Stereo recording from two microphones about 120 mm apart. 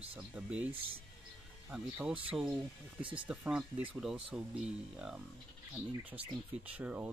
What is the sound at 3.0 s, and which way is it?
Speech, 45° right (ahead or behind).